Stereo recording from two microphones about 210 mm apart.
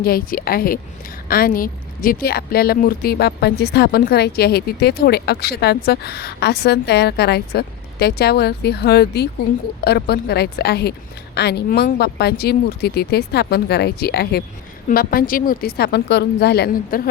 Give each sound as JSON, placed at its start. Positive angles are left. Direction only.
{"t": 0.0, "sound": "a woman's voice", "side_deg": 45}